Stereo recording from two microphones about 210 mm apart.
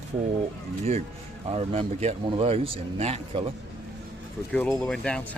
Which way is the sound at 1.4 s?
30° right (ahead or behind).